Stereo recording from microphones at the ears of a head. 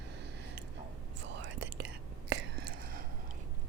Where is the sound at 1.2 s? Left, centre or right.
Right.